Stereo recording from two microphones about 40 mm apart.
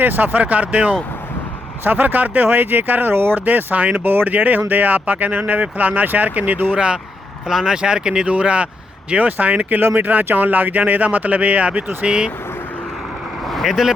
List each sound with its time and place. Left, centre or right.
0.0 s speech: right
1.8 s speech: right
3.4 s speech: right
4.0 s speech: right
6.7 s speech: right
7.4 s speech: centre
8.3 s speech: right
12.0 s speech: right
13.7 s speech: centre